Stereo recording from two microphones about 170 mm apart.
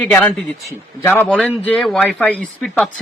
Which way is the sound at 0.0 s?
10° left (ahead or behind).